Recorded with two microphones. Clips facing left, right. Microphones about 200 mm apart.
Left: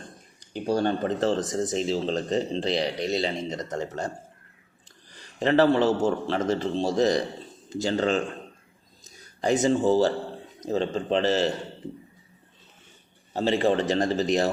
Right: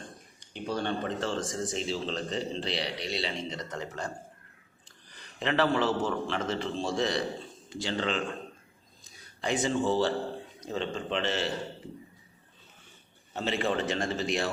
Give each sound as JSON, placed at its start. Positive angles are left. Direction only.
{"t": 0.5, "sound": "speech", "side_deg": 40}
{"t": 5.4, "sound": "speech", "side_deg": 40}
{"t": 13.3, "sound": "speech", "side_deg": 35}